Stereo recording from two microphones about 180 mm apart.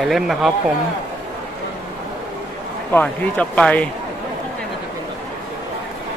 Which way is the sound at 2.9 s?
10° left (ahead or behind).